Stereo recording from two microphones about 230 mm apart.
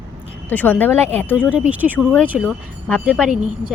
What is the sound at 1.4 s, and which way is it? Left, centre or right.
Speech, centre.